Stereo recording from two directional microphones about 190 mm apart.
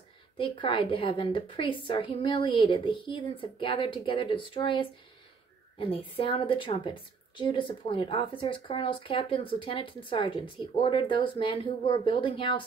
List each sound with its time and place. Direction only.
0.4 s a woman's voice: 25° left (ahead or behind)